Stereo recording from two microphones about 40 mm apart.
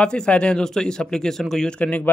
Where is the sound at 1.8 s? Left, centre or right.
Left.